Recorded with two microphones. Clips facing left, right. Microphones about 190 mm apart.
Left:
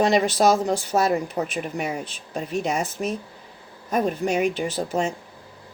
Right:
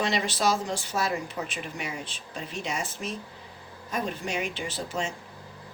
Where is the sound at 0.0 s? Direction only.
45° left (ahead or behind).